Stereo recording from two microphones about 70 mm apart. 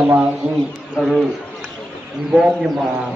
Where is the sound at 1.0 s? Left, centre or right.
Centre.